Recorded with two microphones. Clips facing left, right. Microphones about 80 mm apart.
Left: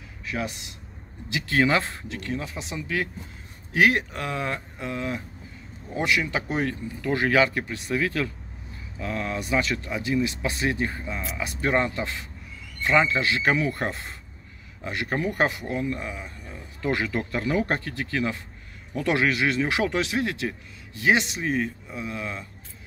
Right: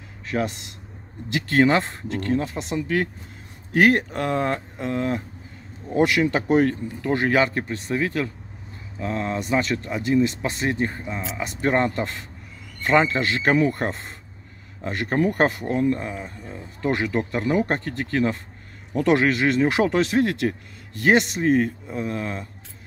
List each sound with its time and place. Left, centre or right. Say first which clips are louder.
1.3 s speech: right 4 dB; right
6.4 s speech: right 8 dB; right